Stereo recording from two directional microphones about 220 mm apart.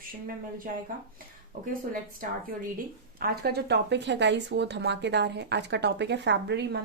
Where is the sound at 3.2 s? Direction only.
45° right (ahead or behind).